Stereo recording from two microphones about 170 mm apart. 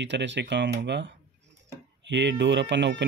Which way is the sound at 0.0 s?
90° right.